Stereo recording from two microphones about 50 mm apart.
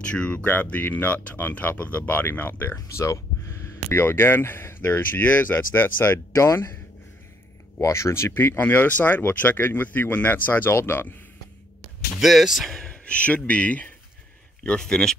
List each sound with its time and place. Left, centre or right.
0.0 s speech: left
2.7 s speech: left
3.9 s speech: left
6.3 s speech: left
7.8 s speech: left
8.3 s speech: left
10.7 s speech: left
12.2 s speech: centre
12.8 s speech: left
14.8 s speech: centre